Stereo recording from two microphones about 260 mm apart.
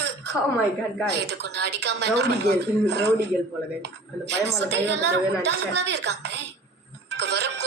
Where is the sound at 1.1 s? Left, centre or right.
Right.